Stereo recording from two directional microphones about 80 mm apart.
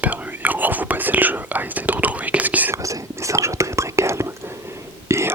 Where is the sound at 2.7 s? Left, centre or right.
Right.